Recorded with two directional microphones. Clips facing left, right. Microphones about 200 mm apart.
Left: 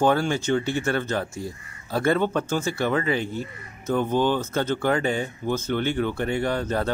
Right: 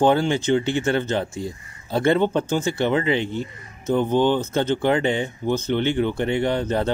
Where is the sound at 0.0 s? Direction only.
25° right (ahead or behind).